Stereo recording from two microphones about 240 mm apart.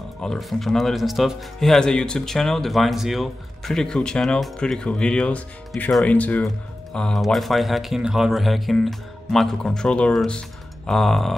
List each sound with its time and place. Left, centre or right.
0.2 s speech: centre